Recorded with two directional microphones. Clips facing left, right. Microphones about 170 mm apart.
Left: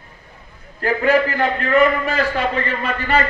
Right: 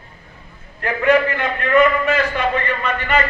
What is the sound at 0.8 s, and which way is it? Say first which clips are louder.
A man's voice: even; 35° left (ahead or behind).